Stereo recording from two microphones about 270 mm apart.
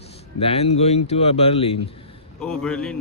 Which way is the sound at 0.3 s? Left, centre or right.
Left.